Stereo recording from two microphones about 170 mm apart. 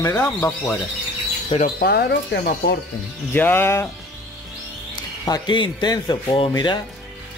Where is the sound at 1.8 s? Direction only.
70° left (ahead or behind).